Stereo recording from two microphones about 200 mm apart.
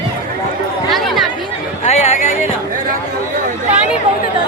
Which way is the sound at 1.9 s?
35° left (ahead or behind).